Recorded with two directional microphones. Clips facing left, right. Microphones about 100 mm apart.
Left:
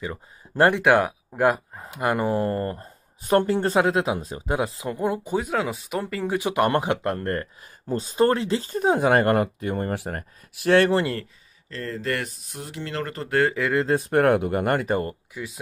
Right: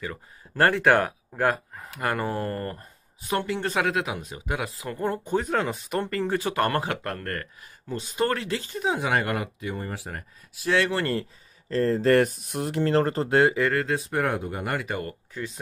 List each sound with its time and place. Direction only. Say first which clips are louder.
0.0 s speech: left 2 dB; 20° left (ahead or behind)
3.2 s speech: left 7 dB; 45° left (ahead or behind); by 4.8 s 30° left (ahead or behind)
4.8 s speech: left 3 dB; 15° left (ahead or behind)
6.3 s speech: left 4 dB; 15° left (ahead or behind)
8.6 s speech: left 7 dB; 40° left (ahead or behind); by 10.9 s 55° left (ahead or behind)
11.7 s speech: right 9 dB; 35° right (ahead or behind)
12.4 s speech: right 8 dB; 60° right (ahead or behind)
12.8 s speech: right 8 dB; 35° right (ahead or behind)
13.8 s speech: left 7 dB; 50° left (ahead or behind); by 15.1 s 35° left (ahead or behind)
15.3 s speech: even; 10° left (ahead or behind)